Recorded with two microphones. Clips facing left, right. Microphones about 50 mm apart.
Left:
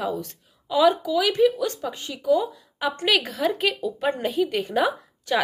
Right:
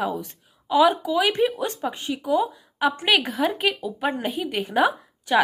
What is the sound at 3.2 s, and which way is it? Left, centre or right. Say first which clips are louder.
A woman's voice: even; right.